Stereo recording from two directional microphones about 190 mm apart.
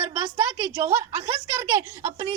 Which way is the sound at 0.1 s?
15° right (ahead or behind).